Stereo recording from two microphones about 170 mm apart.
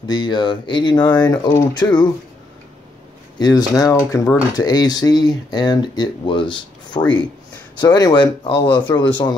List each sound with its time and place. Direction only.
0.0 s speech: 25° left (ahead or behind)
3.3 s speech: 25° left (ahead or behind)